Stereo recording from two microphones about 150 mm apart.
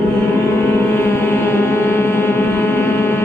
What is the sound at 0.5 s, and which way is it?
Music, 15° left (ahead or behind).